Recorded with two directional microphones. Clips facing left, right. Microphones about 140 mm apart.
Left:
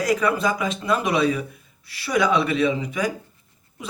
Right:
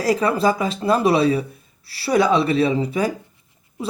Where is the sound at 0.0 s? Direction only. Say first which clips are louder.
Right 3 dB; 30° right (ahead or behind).